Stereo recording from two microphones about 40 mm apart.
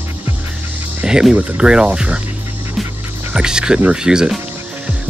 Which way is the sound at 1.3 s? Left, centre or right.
Right.